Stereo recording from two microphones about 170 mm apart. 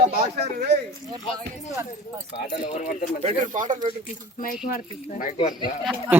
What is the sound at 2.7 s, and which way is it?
Speech, 50° left (ahead or behind).